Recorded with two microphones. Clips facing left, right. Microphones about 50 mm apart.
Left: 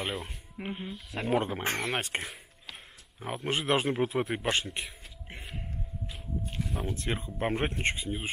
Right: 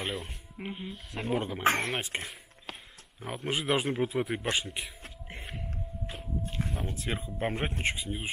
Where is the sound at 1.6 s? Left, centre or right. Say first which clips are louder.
Right 5 dB; right.